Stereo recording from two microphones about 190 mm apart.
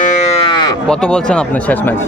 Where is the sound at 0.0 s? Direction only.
40° left (ahead or behind).